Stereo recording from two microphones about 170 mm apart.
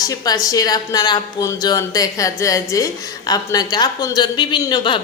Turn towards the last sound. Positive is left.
turn(degrees=25)  # may be behind; listen again after turning